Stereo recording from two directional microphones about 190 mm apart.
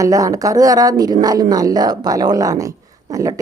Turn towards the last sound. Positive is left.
turn(degrees=-20)  # may be behind; listen again after turning